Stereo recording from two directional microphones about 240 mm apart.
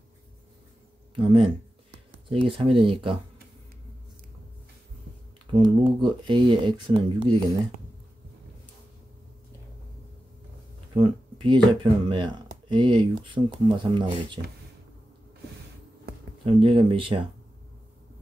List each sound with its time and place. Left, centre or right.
1.1 s speech: right
5.5 s speech: centre
11.0 s speech: centre
16.4 s speech: right